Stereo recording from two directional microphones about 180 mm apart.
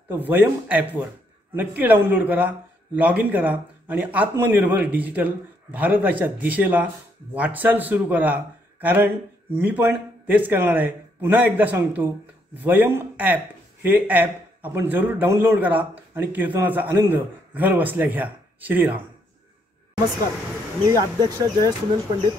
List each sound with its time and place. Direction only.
0.1 s a man's voice: 10° right (ahead or behind)
20.8 s speech: 20° right (ahead or behind)